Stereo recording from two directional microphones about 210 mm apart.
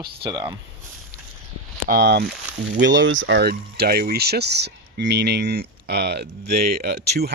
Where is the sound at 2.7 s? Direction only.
60° right (ahead or behind).